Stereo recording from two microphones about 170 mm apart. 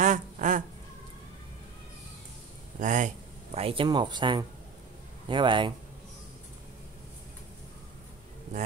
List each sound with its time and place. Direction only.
0.0 s a sound: 50° right (ahead or behind)
2.8 s speech: 50° right (ahead or behind)
3.5 s speech: 35° right (ahead or behind)